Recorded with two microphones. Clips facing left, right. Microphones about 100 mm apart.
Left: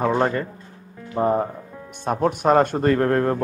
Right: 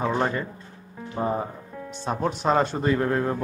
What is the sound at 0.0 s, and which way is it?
Speech, 45° left (ahead or behind).